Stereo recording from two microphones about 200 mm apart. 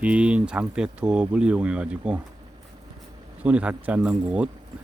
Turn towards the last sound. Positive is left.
turn(degrees=-5)  # may be behind; listen again after turning